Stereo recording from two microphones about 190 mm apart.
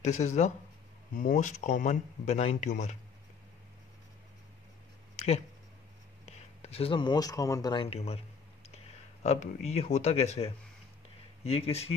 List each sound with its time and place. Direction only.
0.0 s speech: 35° left (ahead or behind)
5.1 s a sound: 35° left (ahead or behind)
6.2 s speech: 35° left (ahead or behind)